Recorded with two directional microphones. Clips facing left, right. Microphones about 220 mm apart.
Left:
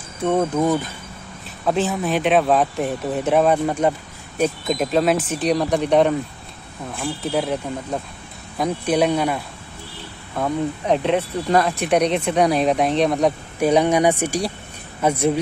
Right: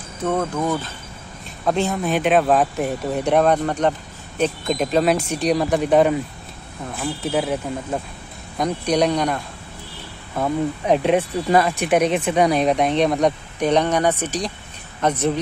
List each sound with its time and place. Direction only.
0.2 s speech: 15° left (ahead or behind)
1.7 s speech: 5° left (ahead or behind)
10.3 s speech: 5° right (ahead or behind)
11.6 s speech: centre (ahead or behind)